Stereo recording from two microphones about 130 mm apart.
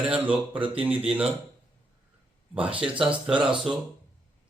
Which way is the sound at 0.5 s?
45° right (ahead or behind).